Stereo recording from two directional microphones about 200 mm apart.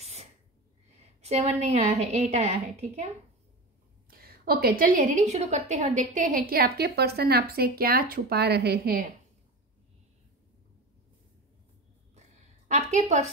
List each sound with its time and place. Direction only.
0.0 s sneeze: 35° right (ahead or behind)
1.2 s a woman's voice: 30° right (ahead or behind)
4.1 s a woman's voice: 50° right (ahead or behind)